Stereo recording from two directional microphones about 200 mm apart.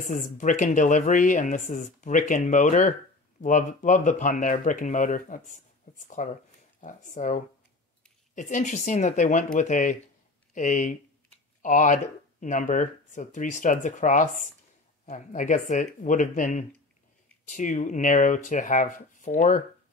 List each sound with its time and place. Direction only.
0.0 s speech: 40° left (ahead or behind)